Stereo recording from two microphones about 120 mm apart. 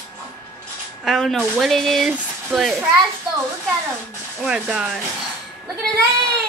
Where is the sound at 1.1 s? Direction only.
Centre (ahead or behind).